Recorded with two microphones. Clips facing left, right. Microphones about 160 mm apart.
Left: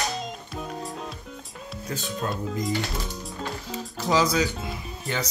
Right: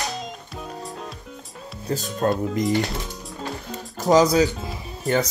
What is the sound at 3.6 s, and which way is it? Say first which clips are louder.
Music: right 8 dB; 45° right (ahead or behind).